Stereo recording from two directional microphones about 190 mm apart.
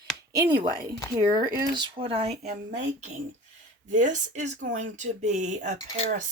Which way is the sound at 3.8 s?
40° right (ahead or behind).